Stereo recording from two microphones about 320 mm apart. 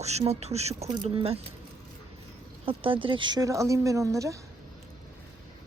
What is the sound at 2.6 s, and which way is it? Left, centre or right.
A woman's voice, centre.